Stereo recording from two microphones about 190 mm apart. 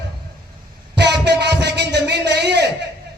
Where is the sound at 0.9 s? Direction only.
65° right (ahead or behind).